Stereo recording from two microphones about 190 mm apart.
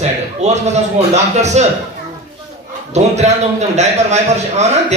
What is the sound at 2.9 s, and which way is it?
A man's voice, 35° right (ahead or behind).